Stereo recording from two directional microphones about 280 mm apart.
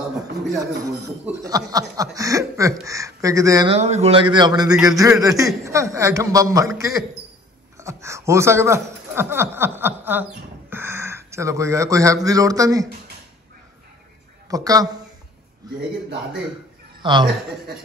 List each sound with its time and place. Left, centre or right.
0.6 s speech: centre
14.5 s speech: centre
17.0 s a man's voice: centre